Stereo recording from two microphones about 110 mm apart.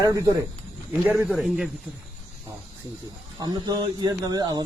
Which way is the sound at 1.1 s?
Centre (ahead or behind).